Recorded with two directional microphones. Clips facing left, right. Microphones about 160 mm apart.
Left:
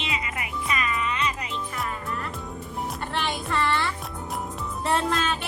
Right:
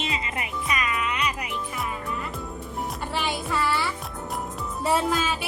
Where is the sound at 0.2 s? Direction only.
25° right (ahead or behind).